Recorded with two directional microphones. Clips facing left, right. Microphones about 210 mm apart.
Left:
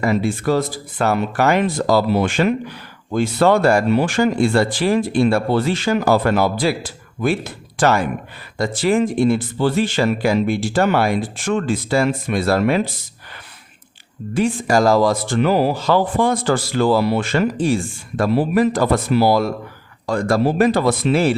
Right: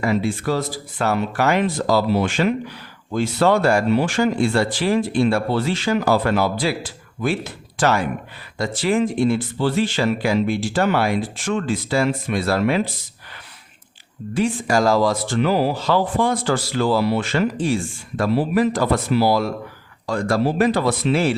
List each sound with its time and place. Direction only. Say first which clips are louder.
0.0 s speech: left 2 dB; 45° left (ahead or behind)
7.8 s speech: left 2 dB; 50° left (ahead or behind)
14.3 s speech: left 2 dB; 45° left (ahead or behind)